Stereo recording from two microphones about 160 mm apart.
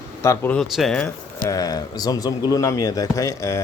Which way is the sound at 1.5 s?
20° left (ahead or behind).